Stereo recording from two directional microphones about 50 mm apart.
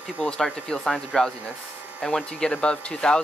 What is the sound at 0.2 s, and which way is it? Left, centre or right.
Speech, centre.